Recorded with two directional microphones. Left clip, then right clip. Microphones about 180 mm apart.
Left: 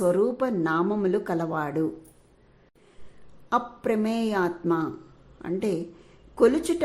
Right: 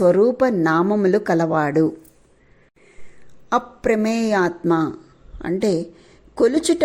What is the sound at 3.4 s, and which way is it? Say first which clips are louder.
A woman's voice: right 6 dB; 25° right (ahead or behind).